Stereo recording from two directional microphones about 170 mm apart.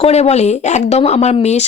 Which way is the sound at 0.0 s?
40° left (ahead or behind).